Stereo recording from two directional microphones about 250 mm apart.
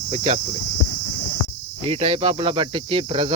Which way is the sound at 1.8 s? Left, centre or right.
Right.